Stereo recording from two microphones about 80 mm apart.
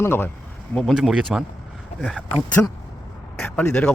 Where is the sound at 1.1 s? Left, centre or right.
Centre.